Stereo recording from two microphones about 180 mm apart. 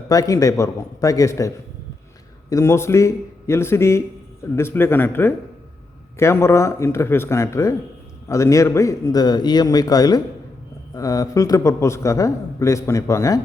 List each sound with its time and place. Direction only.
0.1 s a man's voice: 20° left (ahead or behind)